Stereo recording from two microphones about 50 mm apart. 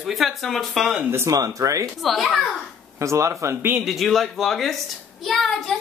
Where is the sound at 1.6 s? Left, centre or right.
Right.